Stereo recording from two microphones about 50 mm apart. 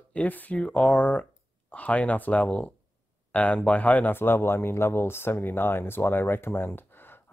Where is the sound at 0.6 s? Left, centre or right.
Left.